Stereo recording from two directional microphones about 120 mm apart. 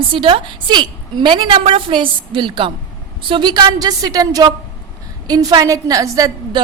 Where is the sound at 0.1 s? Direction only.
45° right (ahead or behind).